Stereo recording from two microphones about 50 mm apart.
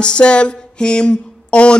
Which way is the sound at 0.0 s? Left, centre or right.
Left.